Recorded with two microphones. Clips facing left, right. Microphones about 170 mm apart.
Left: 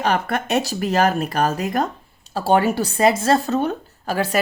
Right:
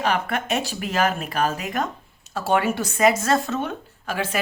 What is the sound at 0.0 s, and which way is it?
Speech, 40° left (ahead or behind).